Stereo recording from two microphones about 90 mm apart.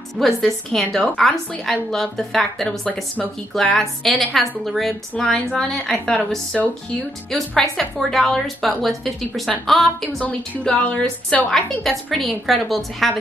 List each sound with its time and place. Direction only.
0.2 s a woman's voice: 5° left (ahead or behind)
10.2 s a woman's voice: 15° left (ahead or behind); by 13.2 s centre (ahead or behind)